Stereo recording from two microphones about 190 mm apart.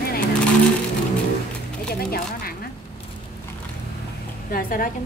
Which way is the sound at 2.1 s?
50° left (ahead or behind).